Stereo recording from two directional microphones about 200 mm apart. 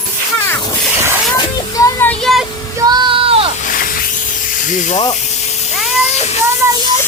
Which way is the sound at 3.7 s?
45° left (ahead or behind).